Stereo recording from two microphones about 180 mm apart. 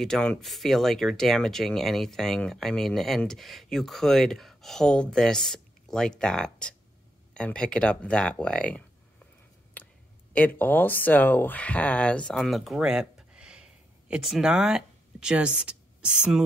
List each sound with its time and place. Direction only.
0.0 s speech: 5° left (ahead or behind)
9.8 s a sound: 10° left (ahead or behind)
10.3 s speech: 10° left (ahead or behind)